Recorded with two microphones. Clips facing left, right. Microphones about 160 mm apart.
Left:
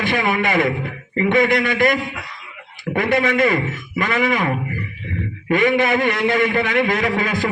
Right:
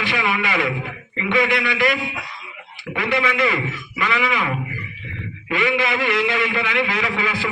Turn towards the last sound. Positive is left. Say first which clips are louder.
# left 4 dB
turn(degrees=45)  # may be behind; listen again after turning